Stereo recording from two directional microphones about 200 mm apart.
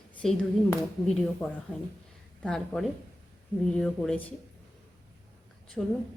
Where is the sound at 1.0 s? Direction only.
5° left (ahead or behind).